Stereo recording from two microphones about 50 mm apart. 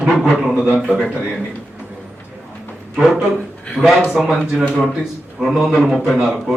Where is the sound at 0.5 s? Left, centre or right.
Centre.